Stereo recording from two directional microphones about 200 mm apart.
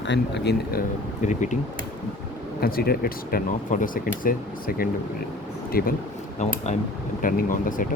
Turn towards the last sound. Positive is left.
turn(degrees=40)  # may be behind; listen again after turning